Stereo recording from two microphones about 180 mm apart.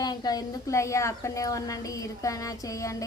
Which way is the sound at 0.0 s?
20° left (ahead or behind).